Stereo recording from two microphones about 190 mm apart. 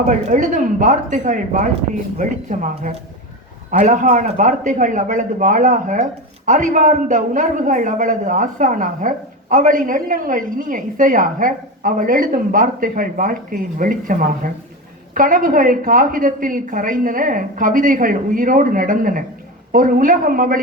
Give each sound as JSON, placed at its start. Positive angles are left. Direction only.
{"t": 0.3, "sound": "a man's voice", "side_deg": -40}